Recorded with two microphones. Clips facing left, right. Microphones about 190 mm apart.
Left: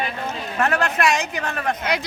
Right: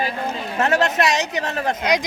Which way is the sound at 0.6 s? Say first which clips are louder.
Right 2 dB; 25° right (ahead or behind).